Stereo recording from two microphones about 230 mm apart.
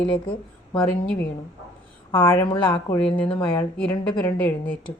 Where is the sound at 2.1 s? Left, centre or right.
Centre.